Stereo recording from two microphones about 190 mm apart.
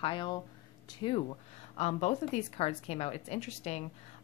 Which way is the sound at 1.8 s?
35° left (ahead or behind).